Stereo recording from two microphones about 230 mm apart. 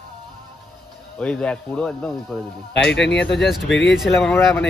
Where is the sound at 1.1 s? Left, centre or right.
Centre.